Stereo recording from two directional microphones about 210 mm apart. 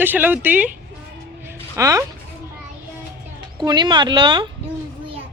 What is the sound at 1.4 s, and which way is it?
Music, 15° right (ahead or behind).